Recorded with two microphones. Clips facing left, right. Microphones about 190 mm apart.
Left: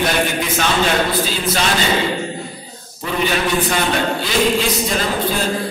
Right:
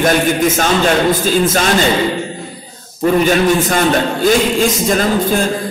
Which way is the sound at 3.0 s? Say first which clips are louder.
Right 8 dB; 45° right (ahead or behind).